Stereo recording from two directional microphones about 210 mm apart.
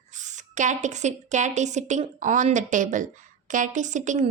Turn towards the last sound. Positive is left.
turn(degrees=-35)  # may be behind; listen again after turning